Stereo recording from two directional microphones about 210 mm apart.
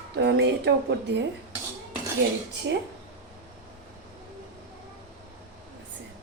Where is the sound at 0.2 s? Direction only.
50° right (ahead or behind).